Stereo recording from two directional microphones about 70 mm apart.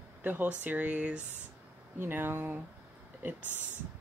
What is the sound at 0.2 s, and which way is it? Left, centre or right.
Speech, right.